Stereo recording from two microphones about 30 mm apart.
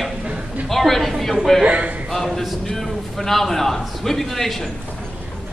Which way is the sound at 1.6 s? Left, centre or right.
Right.